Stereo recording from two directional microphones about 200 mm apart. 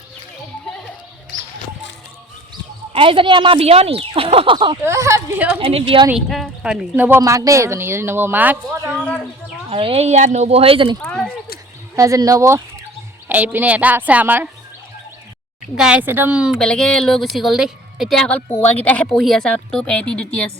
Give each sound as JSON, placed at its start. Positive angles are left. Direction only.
{"t": 2.9, "sound": "a woman's voice", "side_deg": -25}
{"t": 4.8, "sound": "speech", "side_deg": -15}
{"t": 5.5, "sound": "a woman's voice", "side_deg": -25}
{"t": 6.1, "sound": "speech", "side_deg": 0}
{"t": 9.0, "sound": "speech", "side_deg": 5}
{"t": 9.6, "sound": "a woman's voice", "side_deg": -30}
{"t": 11.0, "sound": "a sound", "side_deg": 5}
{"t": 11.9, "sound": "speech", "side_deg": -15}
{"t": 15.7, "sound": "speech", "side_deg": -5}